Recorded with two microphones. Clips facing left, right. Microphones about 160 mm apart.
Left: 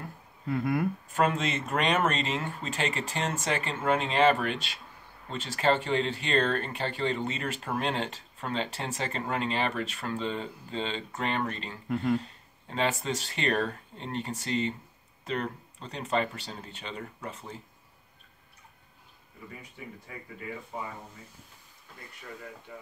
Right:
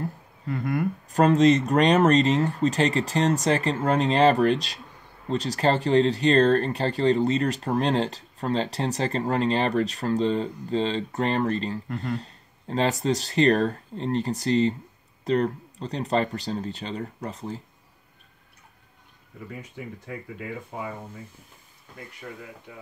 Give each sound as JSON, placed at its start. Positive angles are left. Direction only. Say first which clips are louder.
{"t": 0.5, "sound": "speech", "louder": "right 1 dB", "side_deg": 5}
{"t": 1.1, "sound": "speech", "louder": "right 11 dB", "side_deg": -40}
{"t": 11.9, "sound": "speech", "louder": "left 6 dB", "side_deg": 0}
{"t": 12.2, "sound": "speech", "louder": "even", "side_deg": -35}